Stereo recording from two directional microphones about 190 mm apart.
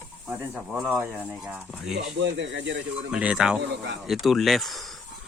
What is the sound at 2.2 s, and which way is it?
Speech, 70° right (ahead or behind).